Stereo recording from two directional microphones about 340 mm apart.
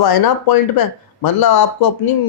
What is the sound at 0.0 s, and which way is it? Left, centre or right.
Speech, left.